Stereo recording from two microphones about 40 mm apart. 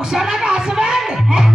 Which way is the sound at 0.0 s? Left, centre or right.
Centre.